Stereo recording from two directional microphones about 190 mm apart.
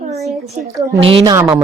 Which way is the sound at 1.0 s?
25° right (ahead or behind).